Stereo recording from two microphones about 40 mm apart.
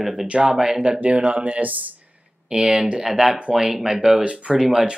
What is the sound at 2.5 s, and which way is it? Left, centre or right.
Speech, right.